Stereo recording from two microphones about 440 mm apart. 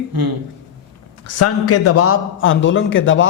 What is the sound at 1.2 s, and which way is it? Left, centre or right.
A man's voice, left.